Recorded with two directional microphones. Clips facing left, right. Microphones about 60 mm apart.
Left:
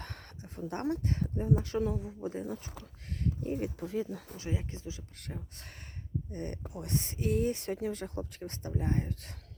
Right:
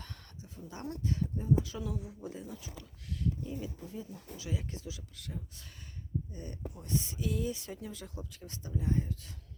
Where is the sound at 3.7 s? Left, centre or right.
Left.